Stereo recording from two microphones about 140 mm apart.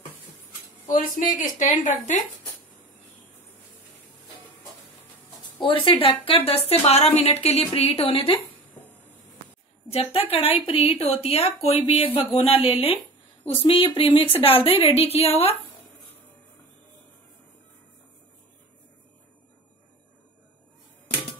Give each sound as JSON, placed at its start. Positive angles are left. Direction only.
{"t": 0.8, "sound": "a woman's voice", "side_deg": 75}
{"t": 5.6, "sound": "a woman's voice", "side_deg": 35}
{"t": 9.8, "sound": "a woman's voice", "side_deg": 45}